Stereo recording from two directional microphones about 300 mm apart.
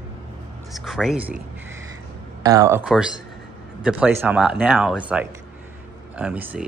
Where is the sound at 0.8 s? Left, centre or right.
Centre.